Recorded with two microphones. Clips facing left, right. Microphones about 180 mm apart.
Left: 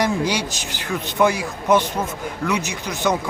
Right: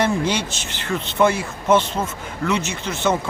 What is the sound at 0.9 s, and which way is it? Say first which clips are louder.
Speech: even; 15° left (ahead or behind).